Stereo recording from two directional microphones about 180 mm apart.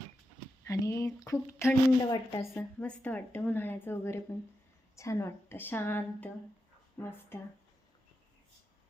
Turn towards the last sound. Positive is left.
turn(degrees=10)  # may be behind; listen again after turning